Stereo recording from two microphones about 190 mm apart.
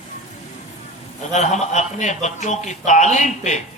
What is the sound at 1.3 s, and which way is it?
A man's voice, 35° left (ahead or behind).